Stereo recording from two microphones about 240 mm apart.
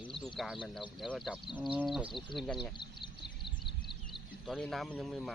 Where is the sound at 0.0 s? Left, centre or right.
Centre.